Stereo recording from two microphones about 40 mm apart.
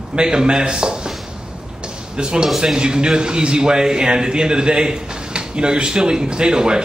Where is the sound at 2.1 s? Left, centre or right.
Centre.